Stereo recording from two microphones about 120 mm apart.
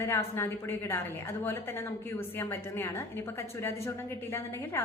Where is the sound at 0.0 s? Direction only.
20° left (ahead or behind).